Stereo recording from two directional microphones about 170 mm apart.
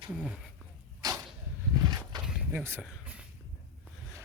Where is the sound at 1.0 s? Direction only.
20° right (ahead or behind).